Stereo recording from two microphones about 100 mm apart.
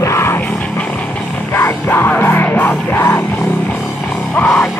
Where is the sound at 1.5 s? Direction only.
20° left (ahead or behind).